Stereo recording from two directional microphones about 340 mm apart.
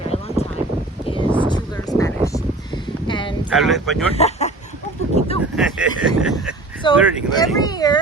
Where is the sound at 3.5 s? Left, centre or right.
Centre.